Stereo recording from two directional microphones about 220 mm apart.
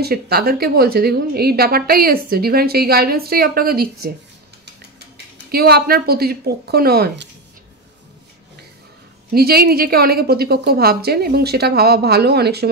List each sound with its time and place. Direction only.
0.0 s a woman's voice: 45° right (ahead or behind)
5.5 s a woman's voice: 45° right (ahead or behind)
9.3 s a woman's voice: 45° right (ahead or behind)